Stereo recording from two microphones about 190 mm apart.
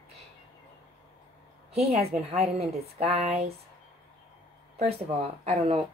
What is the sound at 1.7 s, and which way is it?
Speech, 35° right (ahead or behind).